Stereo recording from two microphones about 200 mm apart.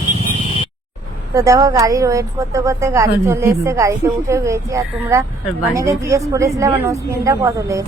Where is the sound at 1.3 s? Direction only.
15° right (ahead or behind).